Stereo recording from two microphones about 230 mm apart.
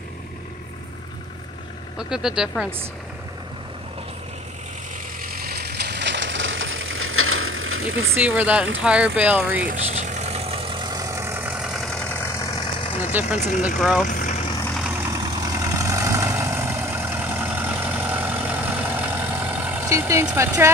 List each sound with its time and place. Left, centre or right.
2.0 s speech: centre
5.2 s vehicle: right
8.2 s speech: centre
9.7 s vehicle: right; by 13.1 s left
13.7 s speech: centre
14.0 s vehicle: left
14.7 s vehicle: centre
15.0 s vehicle: centre